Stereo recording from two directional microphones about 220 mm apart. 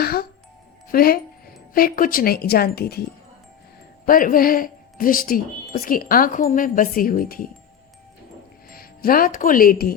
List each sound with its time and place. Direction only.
0.0 s music: 45° left (ahead or behind)
0.9 s a woman's voice: 40° left (ahead or behind)
4.0 s speech: 40° left (ahead or behind)
8.7 s speech: 40° left (ahead or behind)